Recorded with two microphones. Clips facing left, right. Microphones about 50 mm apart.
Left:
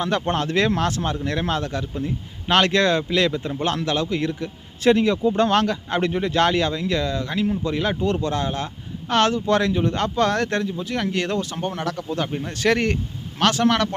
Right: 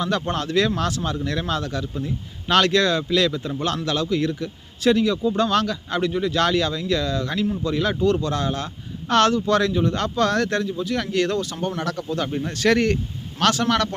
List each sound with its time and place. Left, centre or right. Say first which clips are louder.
0.0 s speech: left 1 dB; left